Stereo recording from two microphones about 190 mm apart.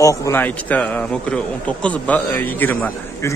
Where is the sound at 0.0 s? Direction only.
15° left (ahead or behind).